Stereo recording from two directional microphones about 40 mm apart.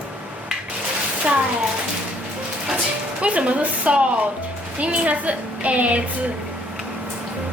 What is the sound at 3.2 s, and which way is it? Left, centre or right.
A woman's voice, right.